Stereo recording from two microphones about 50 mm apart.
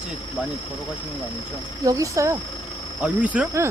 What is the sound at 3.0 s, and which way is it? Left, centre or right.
Speech, right.